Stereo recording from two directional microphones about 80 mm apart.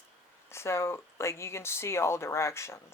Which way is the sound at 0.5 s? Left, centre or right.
Left.